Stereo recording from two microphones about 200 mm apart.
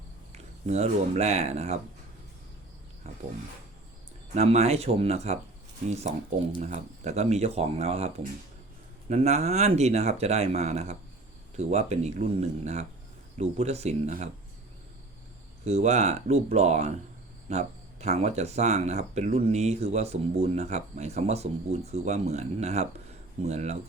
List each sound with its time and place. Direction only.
0.3 s speech: 35° right (ahead or behind)
4.4 s speech: 30° right (ahead or behind)
15.6 s speech: 35° right (ahead or behind)